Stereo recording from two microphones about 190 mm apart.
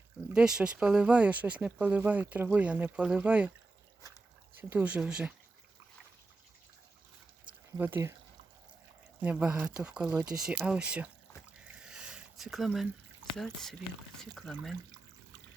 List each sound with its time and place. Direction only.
0.3 s speech: 5° right (ahead or behind)
4.0 s dog: 20° left (ahead or behind)
4.7 s speech: 10° right (ahead or behind)
7.8 s speech: 10° right (ahead or behind)
9.2 s speech: 5° right (ahead or behind)
11.5 s a sound: 5° right (ahead or behind)
13.3 s speech: centre (ahead or behind)